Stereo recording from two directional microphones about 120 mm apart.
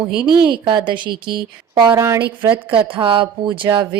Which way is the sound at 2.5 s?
45° right (ahead or behind).